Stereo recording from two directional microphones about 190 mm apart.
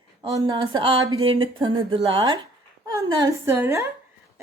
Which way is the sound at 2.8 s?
20° right (ahead or behind).